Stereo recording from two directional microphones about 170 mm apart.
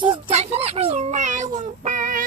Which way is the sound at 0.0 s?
35° right (ahead or behind).